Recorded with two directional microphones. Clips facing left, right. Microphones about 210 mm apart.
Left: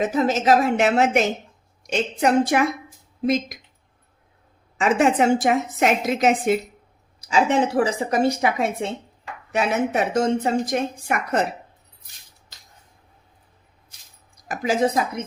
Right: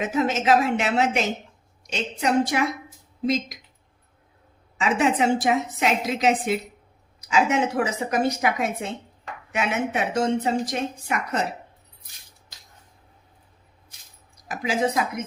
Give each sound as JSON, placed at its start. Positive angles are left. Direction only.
{"t": 0.0, "sound": "a woman's voice", "side_deg": 35}
{"t": 4.8, "sound": "a woman's voice", "side_deg": 50}
{"t": 7.2, "sound": "a woman's voice", "side_deg": 35}
{"t": 14.4, "sound": "speech", "side_deg": 45}